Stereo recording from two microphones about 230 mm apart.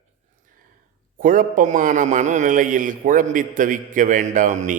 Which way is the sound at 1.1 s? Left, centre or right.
Right.